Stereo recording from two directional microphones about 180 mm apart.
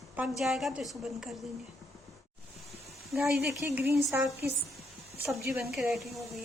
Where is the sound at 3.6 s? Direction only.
10° right (ahead or behind).